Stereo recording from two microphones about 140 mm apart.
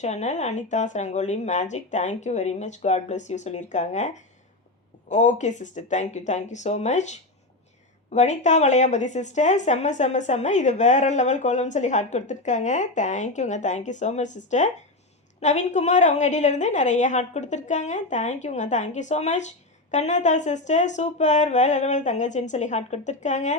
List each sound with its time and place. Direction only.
0.0 s a woman's voice: 55° left (ahead or behind)